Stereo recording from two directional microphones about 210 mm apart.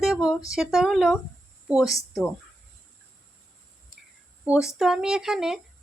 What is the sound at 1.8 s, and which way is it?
Speech, 15° left (ahead or behind).